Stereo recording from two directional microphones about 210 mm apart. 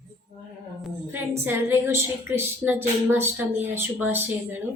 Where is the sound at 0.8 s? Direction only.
10° right (ahead or behind).